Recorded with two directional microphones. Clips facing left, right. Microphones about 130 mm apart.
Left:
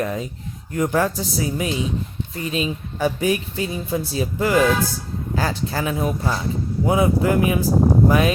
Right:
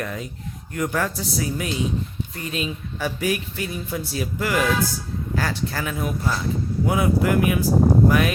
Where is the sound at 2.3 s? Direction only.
20° left (ahead or behind).